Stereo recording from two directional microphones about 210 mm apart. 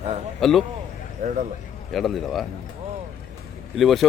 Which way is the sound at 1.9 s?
Centre (ahead or behind).